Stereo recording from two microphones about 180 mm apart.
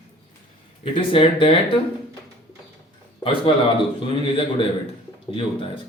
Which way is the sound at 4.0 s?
30° left (ahead or behind).